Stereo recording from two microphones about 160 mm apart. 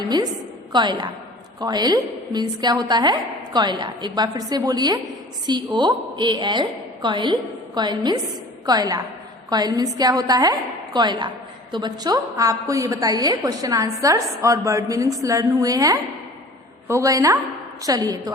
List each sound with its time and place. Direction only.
0.7 s a woman's voice: 30° right (ahead or behind)